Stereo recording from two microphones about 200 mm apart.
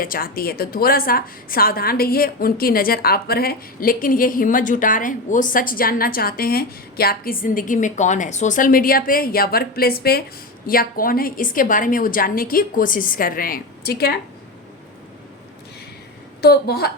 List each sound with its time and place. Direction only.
0.0 s a woman's voice: 45° left (ahead or behind)
16.4 s a woman's voice: 50° left (ahead or behind)